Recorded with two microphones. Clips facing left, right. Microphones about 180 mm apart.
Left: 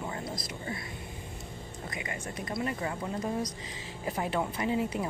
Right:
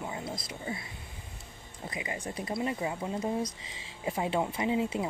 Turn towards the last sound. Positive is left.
turn(degrees=-20)  # may be behind; listen again after turning